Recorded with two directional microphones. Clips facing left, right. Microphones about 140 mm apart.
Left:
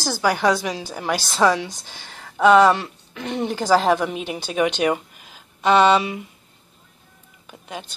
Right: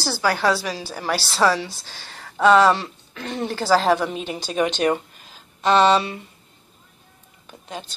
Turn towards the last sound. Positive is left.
turn(degrees=10)  # may be behind; listen again after turning